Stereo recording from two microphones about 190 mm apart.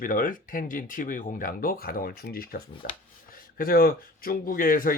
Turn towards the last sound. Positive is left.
turn(degrees=50)  # may be behind; listen again after turning